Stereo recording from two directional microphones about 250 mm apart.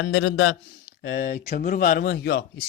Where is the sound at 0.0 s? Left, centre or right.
Left.